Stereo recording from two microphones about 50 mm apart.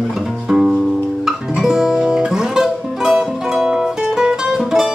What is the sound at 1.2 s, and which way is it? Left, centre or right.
Guitar, centre.